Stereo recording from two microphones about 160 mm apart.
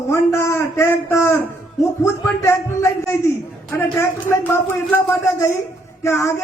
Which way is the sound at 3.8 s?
15° left (ahead or behind).